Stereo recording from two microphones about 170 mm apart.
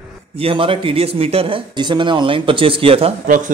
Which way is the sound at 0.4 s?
30° right (ahead or behind).